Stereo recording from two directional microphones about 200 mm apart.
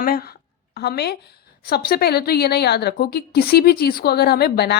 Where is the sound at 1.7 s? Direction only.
50° left (ahead or behind).